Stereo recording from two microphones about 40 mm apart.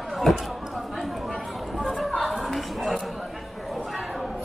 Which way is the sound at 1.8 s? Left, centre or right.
Centre.